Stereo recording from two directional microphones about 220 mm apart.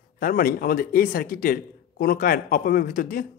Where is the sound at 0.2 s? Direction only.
40° left (ahead or behind).